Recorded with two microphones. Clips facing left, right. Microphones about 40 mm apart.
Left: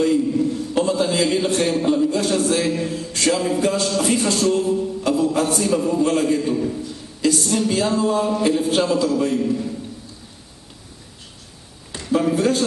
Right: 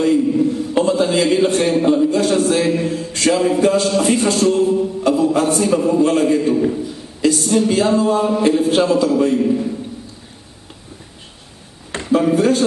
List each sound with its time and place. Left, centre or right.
0.0 s a man's voice: centre
2.4 s a sound: centre
12.1 s speech: centre